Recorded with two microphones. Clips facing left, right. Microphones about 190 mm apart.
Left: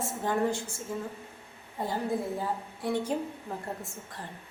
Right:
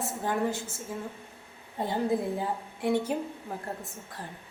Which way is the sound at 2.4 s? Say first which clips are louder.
Right 2 dB; 15° right (ahead or behind).